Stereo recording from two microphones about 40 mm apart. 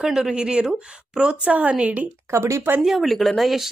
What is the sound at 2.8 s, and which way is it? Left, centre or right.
Speech, centre.